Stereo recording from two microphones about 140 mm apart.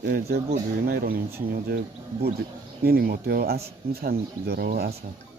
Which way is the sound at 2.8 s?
90° right.